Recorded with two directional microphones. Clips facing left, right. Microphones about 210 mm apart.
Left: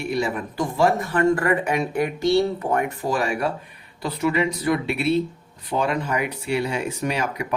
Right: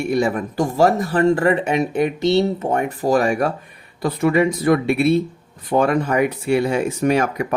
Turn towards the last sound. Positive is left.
turn(degrees=-50)  # may be behind; listen again after turning